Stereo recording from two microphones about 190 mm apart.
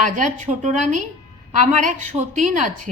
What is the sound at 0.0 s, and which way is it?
A woman's voice, 40° right (ahead or behind).